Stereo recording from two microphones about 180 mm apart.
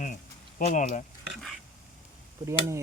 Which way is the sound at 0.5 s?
45° left (ahead or behind).